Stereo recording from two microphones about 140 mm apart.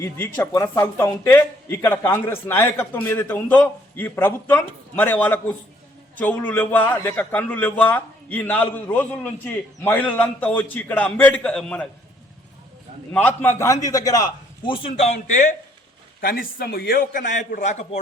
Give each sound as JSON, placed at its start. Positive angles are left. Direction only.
{"t": 0.0, "sound": "speech", "side_deg": 15}
{"t": 13.1, "sound": "a man's voice", "side_deg": 15}
{"t": 14.6, "sound": "a man's voice", "side_deg": 40}
{"t": 16.2, "sound": "a man's voice", "side_deg": 90}